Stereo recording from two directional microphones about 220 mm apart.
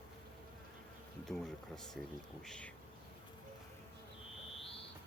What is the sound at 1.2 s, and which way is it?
Speech, centre (ahead or behind).